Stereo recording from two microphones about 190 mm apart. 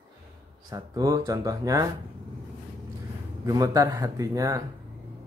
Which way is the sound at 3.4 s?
20° right (ahead or behind).